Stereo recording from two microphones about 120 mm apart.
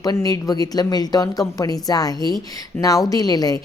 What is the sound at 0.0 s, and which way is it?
Speech, 30° left (ahead or behind).